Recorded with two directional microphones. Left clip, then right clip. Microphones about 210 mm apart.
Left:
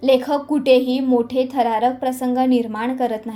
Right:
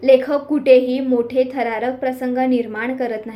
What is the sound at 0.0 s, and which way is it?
A woman's voice, 40° left (ahead or behind).